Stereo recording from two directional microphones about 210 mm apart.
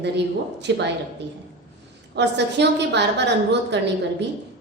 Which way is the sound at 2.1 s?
55° right (ahead or behind).